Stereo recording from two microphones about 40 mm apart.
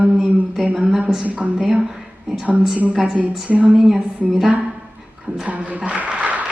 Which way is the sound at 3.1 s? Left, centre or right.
Right.